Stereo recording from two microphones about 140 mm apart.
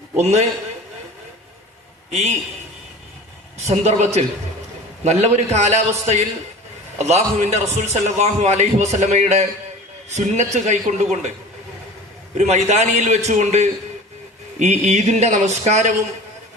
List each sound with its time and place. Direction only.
0.2 s a man's voice: 50° right (ahead or behind)
3.7 s a man's voice: 50° right (ahead or behind)
12.3 s a man's voice: 55° right (ahead or behind)